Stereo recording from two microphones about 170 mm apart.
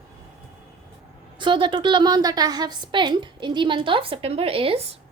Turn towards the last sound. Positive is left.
turn(degrees=-35)  # may be behind; listen again after turning